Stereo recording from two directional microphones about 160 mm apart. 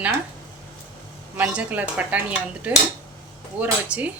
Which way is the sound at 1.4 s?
10° right (ahead or behind).